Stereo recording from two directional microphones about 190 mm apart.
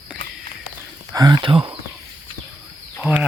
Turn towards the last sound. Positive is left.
turn(degrees=-5)  # may be behind; listen again after turning